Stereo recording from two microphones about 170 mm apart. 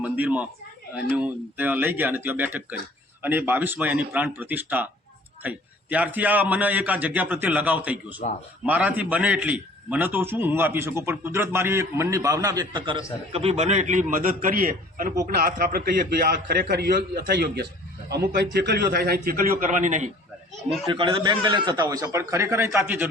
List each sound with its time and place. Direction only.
0.0 s a man's voice: 10° right (ahead or behind); by 20.1 s 45° right (ahead or behind)
20.8 s a man's voice: 30° right (ahead or behind); by 23.0 s 15° right (ahead or behind)